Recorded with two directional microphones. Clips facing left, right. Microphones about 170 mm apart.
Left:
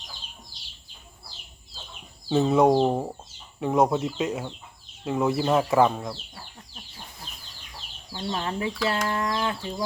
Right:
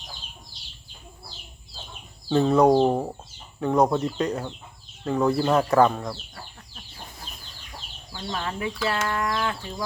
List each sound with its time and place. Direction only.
2.3 s speech: 5° left (ahead or behind)
8.1 s speech: 25° left (ahead or behind)